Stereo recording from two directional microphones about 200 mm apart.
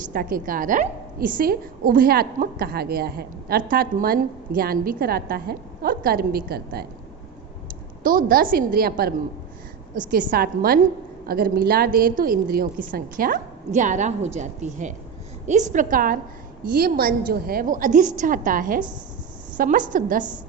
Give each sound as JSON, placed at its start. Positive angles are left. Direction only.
{"t": 0.1, "sound": "a woman's voice", "side_deg": -45}
{"t": 8.0, "sound": "a woman's voice", "side_deg": -45}